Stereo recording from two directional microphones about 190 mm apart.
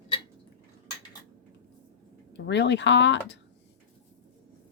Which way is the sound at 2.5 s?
65° left (ahead or behind).